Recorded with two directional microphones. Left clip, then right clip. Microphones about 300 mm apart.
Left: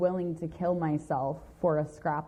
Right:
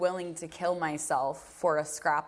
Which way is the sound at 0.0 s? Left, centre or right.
Centre.